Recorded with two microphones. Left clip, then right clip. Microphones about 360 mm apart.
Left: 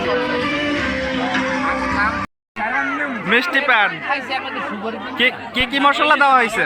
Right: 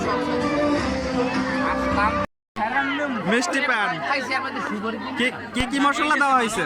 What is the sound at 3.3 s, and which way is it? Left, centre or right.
Speech, centre.